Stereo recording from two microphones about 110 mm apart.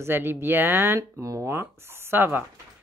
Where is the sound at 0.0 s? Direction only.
20° right (ahead or behind).